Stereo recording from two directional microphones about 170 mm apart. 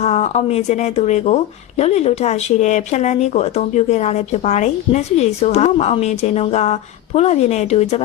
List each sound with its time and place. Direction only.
0.0 s speech: 40° left (ahead or behind)